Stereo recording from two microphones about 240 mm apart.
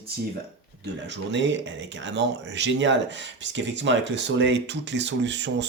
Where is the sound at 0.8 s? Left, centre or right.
Right.